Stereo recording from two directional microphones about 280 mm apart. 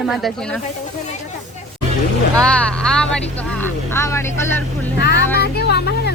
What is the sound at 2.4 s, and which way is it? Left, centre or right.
Speech, centre.